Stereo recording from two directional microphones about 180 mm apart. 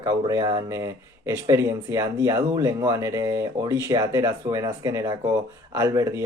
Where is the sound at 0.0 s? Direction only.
20° right (ahead or behind).